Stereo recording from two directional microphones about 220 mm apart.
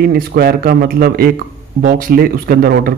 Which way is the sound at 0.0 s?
45° right (ahead or behind).